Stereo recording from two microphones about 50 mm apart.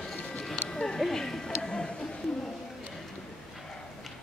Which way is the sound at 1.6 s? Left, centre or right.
Centre.